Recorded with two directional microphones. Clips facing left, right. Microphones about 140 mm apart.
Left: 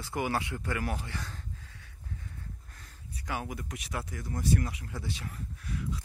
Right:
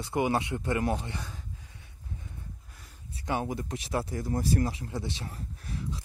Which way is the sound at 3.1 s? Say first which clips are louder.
Right 6 dB; 25° right (ahead or behind).